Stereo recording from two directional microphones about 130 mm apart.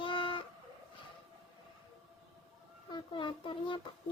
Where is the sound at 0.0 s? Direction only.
40° left (ahead or behind).